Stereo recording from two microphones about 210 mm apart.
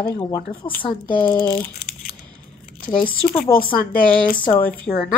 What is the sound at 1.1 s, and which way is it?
Speech, 40° left (ahead or behind).